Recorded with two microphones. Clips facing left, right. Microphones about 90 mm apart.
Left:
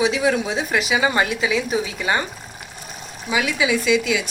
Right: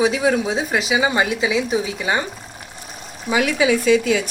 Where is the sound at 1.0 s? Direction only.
20° right (ahead or behind).